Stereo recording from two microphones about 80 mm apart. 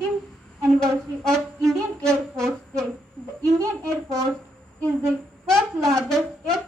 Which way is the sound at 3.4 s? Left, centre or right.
Right.